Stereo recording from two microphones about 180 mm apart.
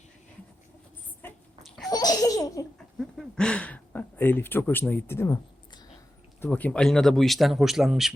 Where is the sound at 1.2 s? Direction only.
10° left (ahead or behind).